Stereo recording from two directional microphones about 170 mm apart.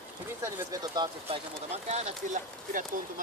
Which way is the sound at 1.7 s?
40° right (ahead or behind).